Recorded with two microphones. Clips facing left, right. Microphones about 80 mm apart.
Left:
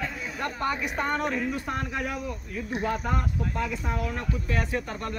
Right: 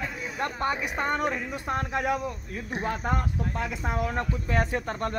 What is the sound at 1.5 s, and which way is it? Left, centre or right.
Speech, right.